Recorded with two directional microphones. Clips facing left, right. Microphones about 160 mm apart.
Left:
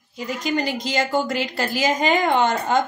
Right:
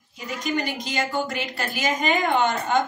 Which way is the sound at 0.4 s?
35° left (ahead or behind).